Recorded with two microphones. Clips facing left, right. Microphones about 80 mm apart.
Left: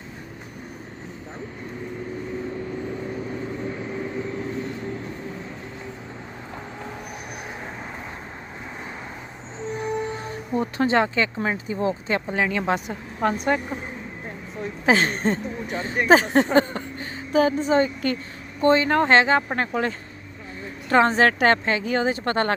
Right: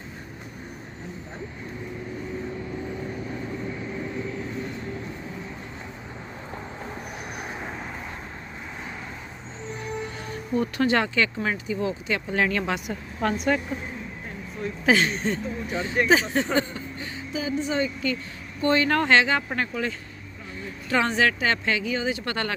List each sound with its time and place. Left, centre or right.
10.1 s speech: left
12.3 s a woman's voice: centre
13.3 s speech: left
14.6 s a sound: left
15.0 s speech: left
18.6 s speech: left
19.1 s speech: left